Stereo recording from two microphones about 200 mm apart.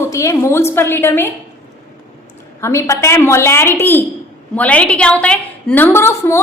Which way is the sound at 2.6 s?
15° left (ahead or behind).